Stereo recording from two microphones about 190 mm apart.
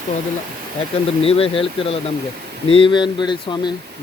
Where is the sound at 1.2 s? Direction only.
30° left (ahead or behind).